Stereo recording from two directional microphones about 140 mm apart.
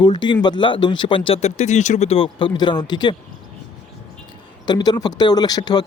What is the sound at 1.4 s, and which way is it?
Speech, 55° left (ahead or behind).